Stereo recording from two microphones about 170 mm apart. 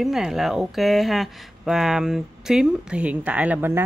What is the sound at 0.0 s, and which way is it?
Speech, centre (ahead or behind).